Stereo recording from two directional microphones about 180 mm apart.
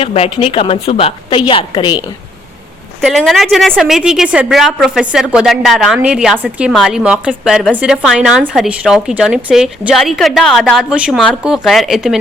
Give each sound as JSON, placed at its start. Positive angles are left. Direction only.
{"t": 0.0, "sound": "a woman's voice", "side_deg": 30}
{"t": 3.0, "sound": "a woman's voice", "side_deg": 0}